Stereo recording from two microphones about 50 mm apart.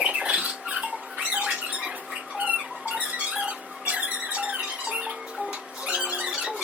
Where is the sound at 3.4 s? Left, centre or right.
Right.